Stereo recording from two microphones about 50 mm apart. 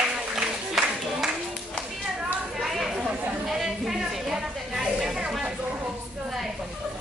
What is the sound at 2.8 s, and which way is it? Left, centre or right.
Chatter, centre.